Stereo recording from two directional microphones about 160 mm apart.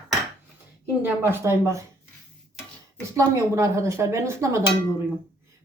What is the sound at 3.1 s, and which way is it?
Speech, 20° right (ahead or behind).